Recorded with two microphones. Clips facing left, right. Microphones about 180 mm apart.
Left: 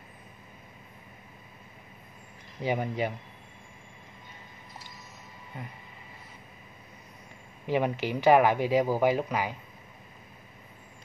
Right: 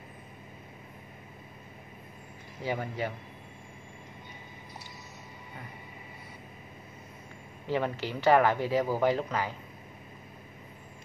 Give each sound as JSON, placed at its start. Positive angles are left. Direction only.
{"t": 2.6, "sound": "speech", "side_deg": 15}
{"t": 7.6, "sound": "speech", "side_deg": 15}